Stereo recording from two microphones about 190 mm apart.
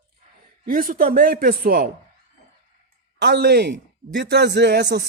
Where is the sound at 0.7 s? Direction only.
45° right (ahead or behind).